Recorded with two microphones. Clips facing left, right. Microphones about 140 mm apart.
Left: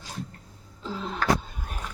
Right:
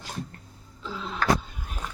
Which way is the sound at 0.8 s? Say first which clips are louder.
Left 2 dB; 40° left (ahead or behind).